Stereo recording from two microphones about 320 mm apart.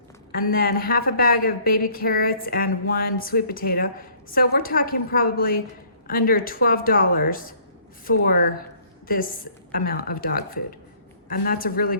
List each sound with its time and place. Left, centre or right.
0.5 s speech: left